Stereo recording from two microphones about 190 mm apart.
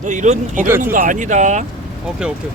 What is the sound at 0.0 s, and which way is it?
Speech, 40° right (ahead or behind).